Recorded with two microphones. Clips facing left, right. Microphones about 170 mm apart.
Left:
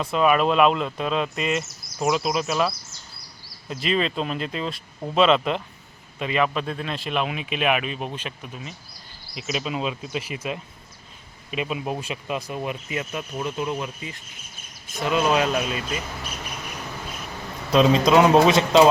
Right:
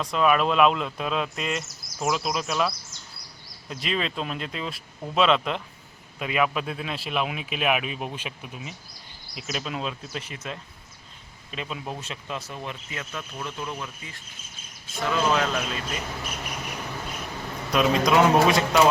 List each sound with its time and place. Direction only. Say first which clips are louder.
0.0 s speech: left 2 dB; 5° left (ahead or behind)
17.7 s a man's voice: left 4 dB; 25° left (ahead or behind)